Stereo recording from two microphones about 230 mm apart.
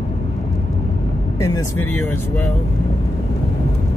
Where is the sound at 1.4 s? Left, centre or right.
Centre.